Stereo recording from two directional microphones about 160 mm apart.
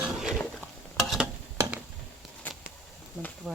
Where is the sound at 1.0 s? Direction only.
Centre (ahead or behind).